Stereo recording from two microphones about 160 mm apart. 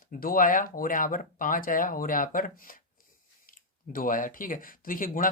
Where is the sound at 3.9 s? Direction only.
60° left (ahead or behind).